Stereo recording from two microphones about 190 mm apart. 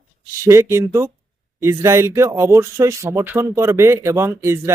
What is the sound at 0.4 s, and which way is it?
Speech, 15° right (ahead or behind).